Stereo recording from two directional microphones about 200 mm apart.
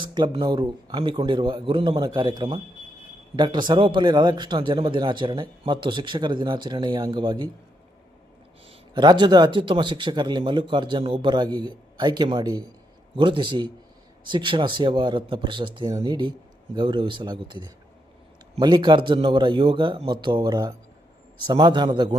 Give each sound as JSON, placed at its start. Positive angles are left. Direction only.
{"t": 0.0, "sound": "a man's voice", "side_deg": -25}
{"t": 9.0, "sound": "a man's voice", "side_deg": -20}